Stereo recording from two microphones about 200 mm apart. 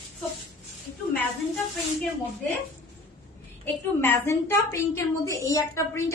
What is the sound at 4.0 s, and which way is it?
A woman's voice, 10° left (ahead or behind).